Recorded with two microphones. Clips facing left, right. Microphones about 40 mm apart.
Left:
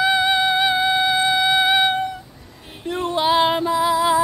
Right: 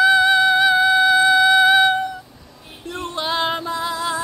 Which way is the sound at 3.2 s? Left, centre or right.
Centre.